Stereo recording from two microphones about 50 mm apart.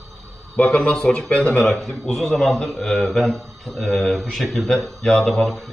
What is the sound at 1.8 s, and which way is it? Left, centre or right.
Speech, centre.